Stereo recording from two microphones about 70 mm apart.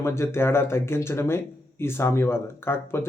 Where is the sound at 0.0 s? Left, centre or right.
Left.